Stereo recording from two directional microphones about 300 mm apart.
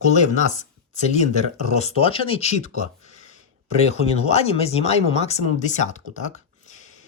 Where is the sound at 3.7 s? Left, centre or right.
Left.